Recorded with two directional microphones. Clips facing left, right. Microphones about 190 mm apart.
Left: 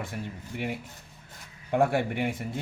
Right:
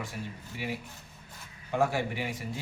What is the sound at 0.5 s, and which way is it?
Speech, 55° left (ahead or behind).